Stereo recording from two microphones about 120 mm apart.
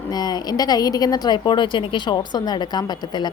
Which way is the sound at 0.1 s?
35° left (ahead or behind).